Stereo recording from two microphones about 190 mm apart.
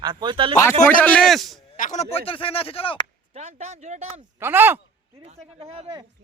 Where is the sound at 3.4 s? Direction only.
35° right (ahead or behind).